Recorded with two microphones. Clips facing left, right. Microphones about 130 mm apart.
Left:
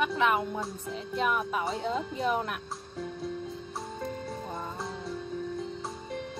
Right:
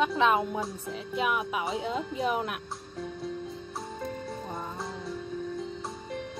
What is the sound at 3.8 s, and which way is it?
Music, centre (ahead or behind).